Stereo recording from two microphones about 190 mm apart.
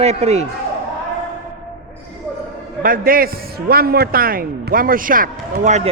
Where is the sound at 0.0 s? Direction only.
35° right (ahead or behind).